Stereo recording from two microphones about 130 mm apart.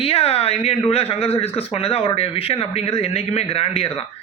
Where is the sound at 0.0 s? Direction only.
50° left (ahead or behind).